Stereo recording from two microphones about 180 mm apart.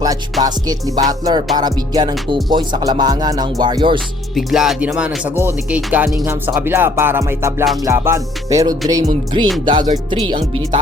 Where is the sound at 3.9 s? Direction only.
Centre (ahead or behind).